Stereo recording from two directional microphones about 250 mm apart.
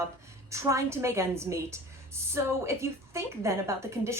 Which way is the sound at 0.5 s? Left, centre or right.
Centre.